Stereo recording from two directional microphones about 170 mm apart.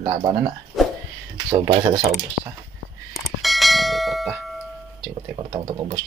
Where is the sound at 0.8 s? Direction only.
Centre (ahead or behind).